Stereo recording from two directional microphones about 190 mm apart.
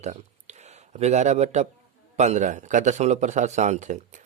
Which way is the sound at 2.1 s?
35° right (ahead or behind).